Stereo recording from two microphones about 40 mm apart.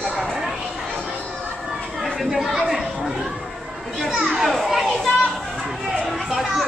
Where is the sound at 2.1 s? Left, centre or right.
Centre.